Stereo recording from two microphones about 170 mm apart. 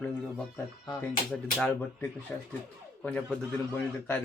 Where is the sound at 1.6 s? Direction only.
10° left (ahead or behind).